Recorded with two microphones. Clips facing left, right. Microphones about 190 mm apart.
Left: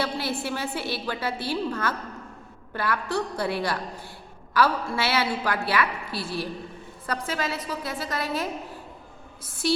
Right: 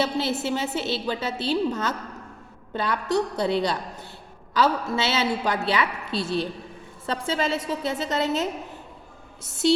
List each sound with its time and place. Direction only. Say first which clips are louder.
0.0 s a woman's voice: right 3 dB; 20° right (ahead or behind)